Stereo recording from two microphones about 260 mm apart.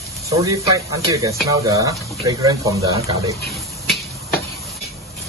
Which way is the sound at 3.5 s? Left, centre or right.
Centre.